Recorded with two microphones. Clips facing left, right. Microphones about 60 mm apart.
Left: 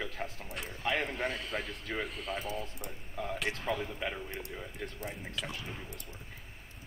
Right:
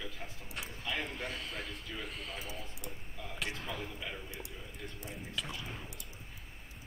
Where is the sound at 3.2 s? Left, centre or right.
Left.